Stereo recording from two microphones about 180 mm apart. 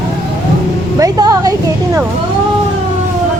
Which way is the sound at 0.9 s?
20° right (ahead or behind).